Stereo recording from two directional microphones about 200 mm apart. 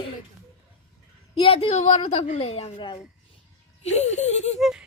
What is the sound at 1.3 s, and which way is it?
A woman's voice, 25° left (ahead or behind).